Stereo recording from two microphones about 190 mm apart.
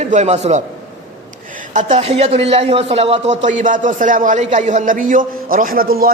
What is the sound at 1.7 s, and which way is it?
A man's voice, 35° right (ahead or behind).